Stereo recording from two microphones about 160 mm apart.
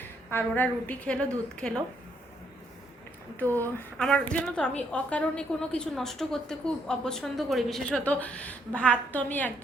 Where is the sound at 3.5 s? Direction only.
10° left (ahead or behind).